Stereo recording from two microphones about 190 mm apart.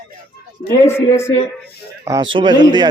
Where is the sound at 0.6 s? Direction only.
15° left (ahead or behind).